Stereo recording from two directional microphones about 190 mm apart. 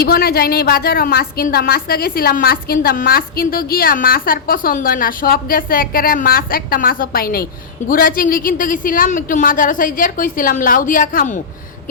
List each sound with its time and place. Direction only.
0.0 s a woman's voice: 55° left (ahead or behind)